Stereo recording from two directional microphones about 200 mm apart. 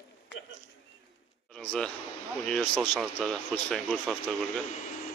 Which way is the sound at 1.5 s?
5° left (ahead or behind).